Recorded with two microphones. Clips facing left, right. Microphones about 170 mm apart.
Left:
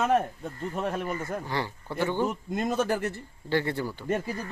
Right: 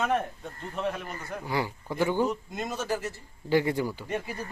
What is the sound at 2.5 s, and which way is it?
Speech, 55° left (ahead or behind).